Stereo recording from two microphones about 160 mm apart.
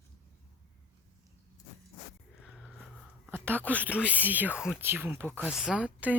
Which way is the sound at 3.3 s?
15° right (ahead or behind).